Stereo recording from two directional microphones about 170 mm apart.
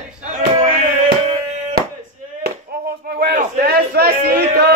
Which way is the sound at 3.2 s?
65° right (ahead or behind).